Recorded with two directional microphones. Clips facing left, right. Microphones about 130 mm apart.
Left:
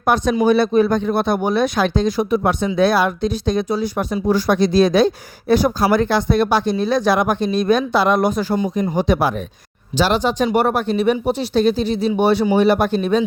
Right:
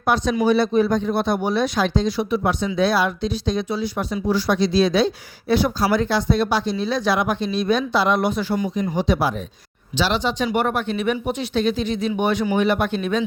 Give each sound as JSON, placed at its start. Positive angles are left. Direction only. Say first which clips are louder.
{"t": 0.0, "sound": "speech", "louder": "left 3 dB", "side_deg": 50}